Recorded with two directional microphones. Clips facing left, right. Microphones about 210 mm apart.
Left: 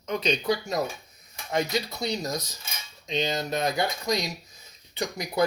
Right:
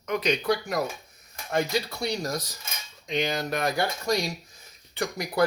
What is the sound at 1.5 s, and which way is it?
Speech, 20° left (ahead or behind).